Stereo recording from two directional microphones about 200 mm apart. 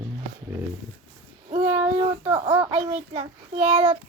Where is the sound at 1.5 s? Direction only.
30° right (ahead or behind).